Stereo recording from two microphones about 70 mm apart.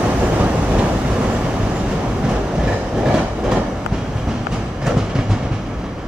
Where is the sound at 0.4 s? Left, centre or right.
Centre.